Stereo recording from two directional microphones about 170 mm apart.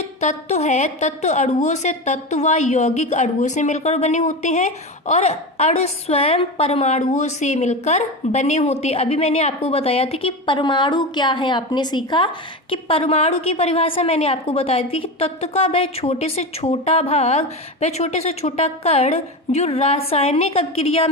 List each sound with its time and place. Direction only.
0.2 s a woman's voice: 40° left (ahead or behind)